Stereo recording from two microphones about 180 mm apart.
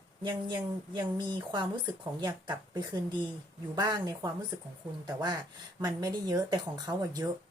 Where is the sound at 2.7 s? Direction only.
25° right (ahead or behind).